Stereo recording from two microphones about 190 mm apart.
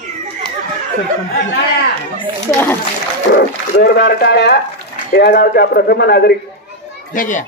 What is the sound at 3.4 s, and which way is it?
A man's voice, 55° left (ahead or behind).